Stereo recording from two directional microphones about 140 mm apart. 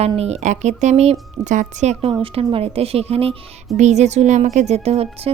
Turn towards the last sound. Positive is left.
turn(degrees=-45)  # may be behind; listen again after turning